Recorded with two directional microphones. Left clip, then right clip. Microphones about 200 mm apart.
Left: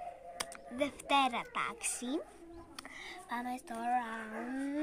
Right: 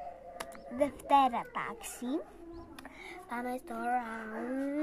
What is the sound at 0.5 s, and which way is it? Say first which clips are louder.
Speech: right 6 dB; 20° left (ahead or behind).